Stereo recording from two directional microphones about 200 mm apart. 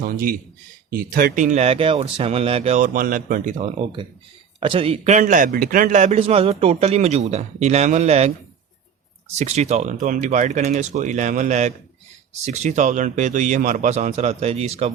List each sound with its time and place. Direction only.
0.0 s a man's voice: 45° right (ahead or behind)
9.4 s a man's voice: 35° right (ahead or behind)